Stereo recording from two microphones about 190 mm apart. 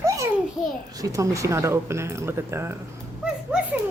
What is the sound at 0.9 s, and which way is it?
Speech, 15° right (ahead or behind).